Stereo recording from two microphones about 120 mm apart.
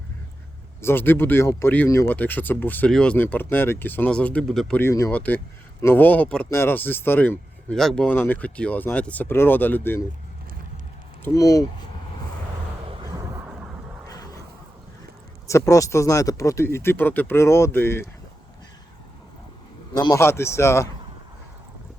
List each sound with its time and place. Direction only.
0.8 s speech: 20° left (ahead or behind)
4.8 s speech: 25° left (ahead or behind)
5.1 s speech: 15° left (ahead or behind)
11.3 s speech: 30° left (ahead or behind)
13.1 s vehicle: 25° right (ahead or behind)
15.4 s speech: 25° left (ahead or behind)
19.9 s speech: 35° left (ahead or behind)
20.1 s speech: 20° left (ahead or behind)